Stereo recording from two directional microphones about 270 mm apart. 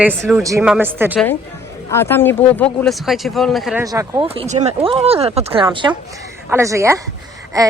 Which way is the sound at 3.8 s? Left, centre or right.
Centre.